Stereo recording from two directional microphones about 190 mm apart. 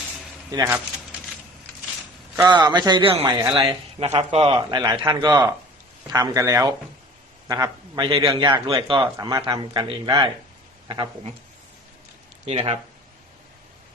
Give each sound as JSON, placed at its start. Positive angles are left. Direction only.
{"t": 0.5, "sound": "speech", "side_deg": -20}
{"t": 2.3, "sound": "a man's voice", "side_deg": -20}
{"t": 4.0, "sound": "a man's voice", "side_deg": -35}
{"t": 12.5, "sound": "speech", "side_deg": -35}